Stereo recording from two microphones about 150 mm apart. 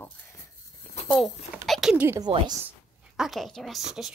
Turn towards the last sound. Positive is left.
turn(degrees=0)  # may be behind; listen again after turning